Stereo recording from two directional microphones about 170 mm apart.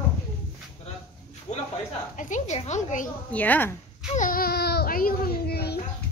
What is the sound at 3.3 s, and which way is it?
Speech, 10° left (ahead or behind).